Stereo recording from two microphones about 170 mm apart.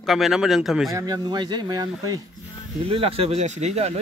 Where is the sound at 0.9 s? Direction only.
20° right (ahead or behind).